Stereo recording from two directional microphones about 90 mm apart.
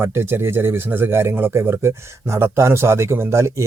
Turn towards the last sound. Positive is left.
turn(degrees=-30)  # may be behind; listen again after turning